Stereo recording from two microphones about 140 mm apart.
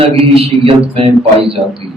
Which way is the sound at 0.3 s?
45° right (ahead or behind).